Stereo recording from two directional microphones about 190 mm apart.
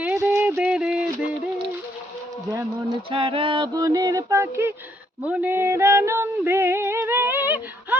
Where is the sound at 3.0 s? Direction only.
30° right (ahead or behind).